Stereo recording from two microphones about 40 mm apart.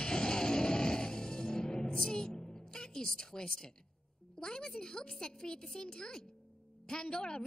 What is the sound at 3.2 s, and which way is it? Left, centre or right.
A woman's voice, centre.